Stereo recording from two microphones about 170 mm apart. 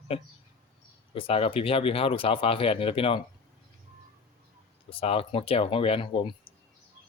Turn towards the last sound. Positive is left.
turn(degrees=30)  # may be behind; listen again after turning